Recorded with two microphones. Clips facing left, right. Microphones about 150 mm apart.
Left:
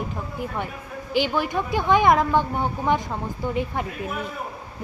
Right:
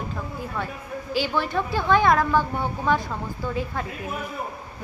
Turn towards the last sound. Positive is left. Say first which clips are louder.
# left 2 dB
turn(degrees=20)  # may be behind; listen again after turning